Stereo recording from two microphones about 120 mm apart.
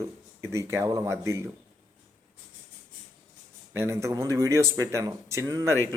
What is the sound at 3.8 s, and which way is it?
Speech, 25° right (ahead or behind).